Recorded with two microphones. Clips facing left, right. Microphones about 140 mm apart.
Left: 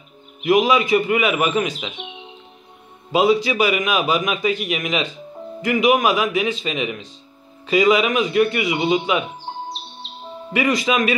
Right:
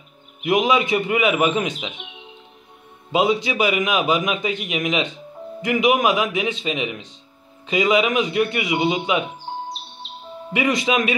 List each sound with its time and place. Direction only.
0.4 s a man's voice: 20° right (ahead or behind)
3.1 s a man's voice: 20° right (ahead or behind)
10.5 s a man's voice: 20° right (ahead or behind)